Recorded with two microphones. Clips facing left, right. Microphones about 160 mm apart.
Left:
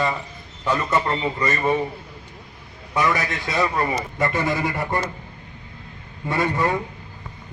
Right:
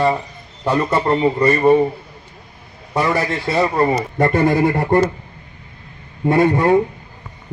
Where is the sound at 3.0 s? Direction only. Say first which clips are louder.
Right 4 dB; 30° right (ahead or behind).